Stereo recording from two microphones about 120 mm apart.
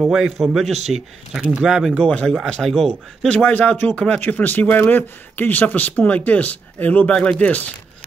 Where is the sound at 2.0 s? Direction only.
10° left (ahead or behind).